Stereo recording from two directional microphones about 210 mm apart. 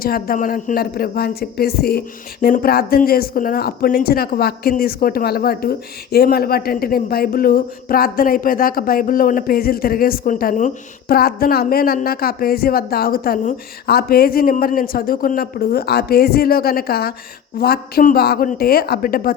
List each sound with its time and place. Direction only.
0.0 s speech: 45° left (ahead or behind)